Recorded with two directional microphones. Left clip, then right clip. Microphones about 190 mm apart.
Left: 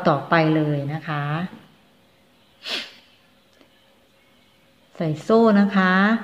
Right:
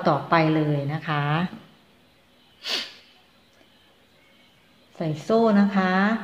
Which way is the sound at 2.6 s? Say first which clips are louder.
Even; 5° left (ahead or behind).